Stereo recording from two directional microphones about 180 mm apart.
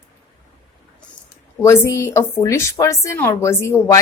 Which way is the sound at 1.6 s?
15° left (ahead or behind).